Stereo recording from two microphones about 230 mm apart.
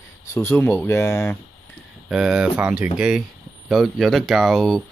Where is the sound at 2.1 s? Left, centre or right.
Centre.